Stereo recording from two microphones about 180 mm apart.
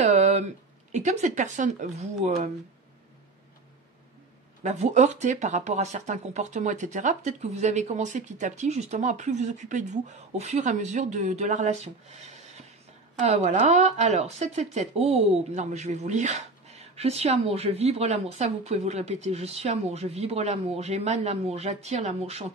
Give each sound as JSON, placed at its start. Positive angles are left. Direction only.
{"t": 0.0, "sound": "a sound", "side_deg": -40}
{"t": 0.9, "sound": "speech", "side_deg": -40}
{"t": 4.6, "sound": "speech", "side_deg": -40}